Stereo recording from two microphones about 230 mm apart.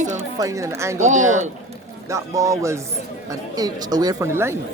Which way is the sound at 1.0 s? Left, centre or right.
Right.